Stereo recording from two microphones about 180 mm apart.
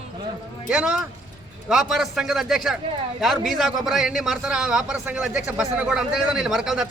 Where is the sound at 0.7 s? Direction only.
5° right (ahead or behind).